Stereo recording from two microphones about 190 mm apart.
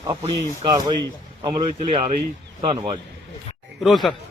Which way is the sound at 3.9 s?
Centre (ahead or behind).